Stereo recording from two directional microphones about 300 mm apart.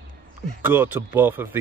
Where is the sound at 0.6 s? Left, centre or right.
Centre.